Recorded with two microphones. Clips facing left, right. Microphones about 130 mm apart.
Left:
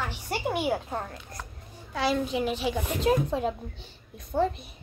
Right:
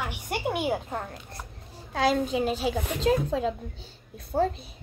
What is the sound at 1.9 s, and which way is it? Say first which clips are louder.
Speech: right 2 dB; 45° right (ahead or behind).